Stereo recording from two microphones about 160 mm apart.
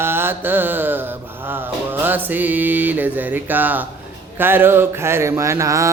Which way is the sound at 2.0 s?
10° right (ahead or behind).